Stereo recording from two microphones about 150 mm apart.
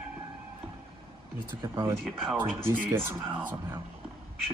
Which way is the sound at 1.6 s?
25° right (ahead or behind).